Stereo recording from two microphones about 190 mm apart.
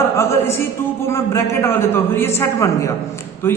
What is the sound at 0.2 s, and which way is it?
Music, 15° left (ahead or behind).